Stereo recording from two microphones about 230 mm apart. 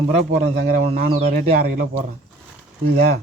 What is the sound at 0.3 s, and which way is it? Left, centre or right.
Speech, right.